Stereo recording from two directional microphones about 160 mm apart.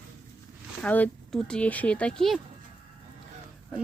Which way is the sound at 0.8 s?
10° left (ahead or behind).